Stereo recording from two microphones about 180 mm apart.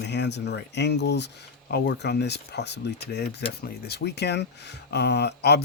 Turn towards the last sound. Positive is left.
turn(degrees=70)  # may be behind; listen again after turning